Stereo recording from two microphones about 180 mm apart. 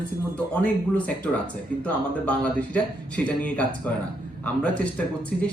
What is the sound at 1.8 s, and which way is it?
Speech, 10° left (ahead or behind).